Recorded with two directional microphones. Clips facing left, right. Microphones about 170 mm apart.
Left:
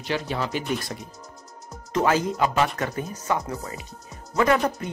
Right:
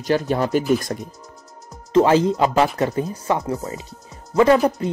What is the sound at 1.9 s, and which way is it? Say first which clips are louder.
Speech: right 7 dB; 30° right (ahead or behind).